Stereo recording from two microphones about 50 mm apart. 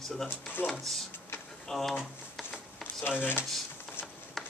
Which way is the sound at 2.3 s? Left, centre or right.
Centre.